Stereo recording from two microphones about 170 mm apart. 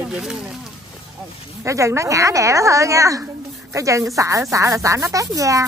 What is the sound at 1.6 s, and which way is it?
Speech, 15° right (ahead or behind).